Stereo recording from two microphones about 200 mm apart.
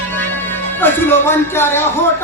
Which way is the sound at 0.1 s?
10° left (ahead or behind).